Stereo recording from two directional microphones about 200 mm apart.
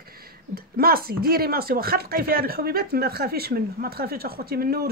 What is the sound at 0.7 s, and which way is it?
Speech, 50° right (ahead or behind).